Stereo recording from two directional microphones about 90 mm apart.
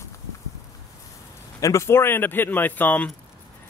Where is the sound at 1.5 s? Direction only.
35° left (ahead or behind).